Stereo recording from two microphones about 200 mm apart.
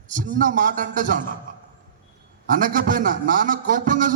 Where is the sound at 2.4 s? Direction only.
45° right (ahead or behind).